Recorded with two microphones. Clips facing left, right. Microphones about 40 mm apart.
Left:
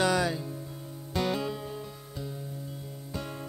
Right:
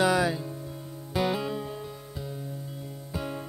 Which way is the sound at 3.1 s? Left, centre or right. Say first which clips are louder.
Right 4 dB; centre.